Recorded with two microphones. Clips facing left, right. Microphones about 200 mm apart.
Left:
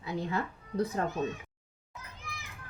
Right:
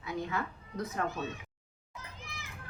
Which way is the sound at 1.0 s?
30° left (ahead or behind).